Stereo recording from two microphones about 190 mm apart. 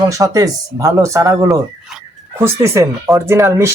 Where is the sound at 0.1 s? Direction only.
15° right (ahead or behind).